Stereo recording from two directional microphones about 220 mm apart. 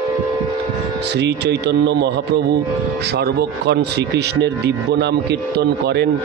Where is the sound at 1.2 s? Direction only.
50° right (ahead or behind).